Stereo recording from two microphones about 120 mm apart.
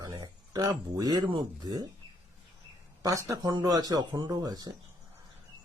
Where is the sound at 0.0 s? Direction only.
35° right (ahead or behind).